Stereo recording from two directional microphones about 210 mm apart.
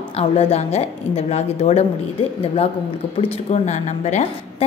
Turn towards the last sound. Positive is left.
turn(degrees=35)  # may be behind; listen again after turning